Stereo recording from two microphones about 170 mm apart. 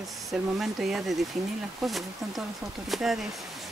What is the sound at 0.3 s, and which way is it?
Speech, centre (ahead or behind).